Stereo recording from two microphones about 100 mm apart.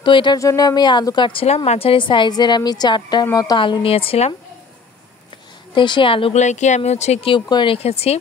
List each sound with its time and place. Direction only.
0.0 s a woman's voice: 50° left (ahead or behind)
0.4 s a woman's voice: 35° left (ahead or behind)
3.8 s speech: 70° left (ahead or behind)
5.8 s a woman's voice: 55° left (ahead or behind)
6.8 s speech: 90° left
7.3 s a woman's voice: 50° left (ahead or behind)
7.7 s speech: 90° left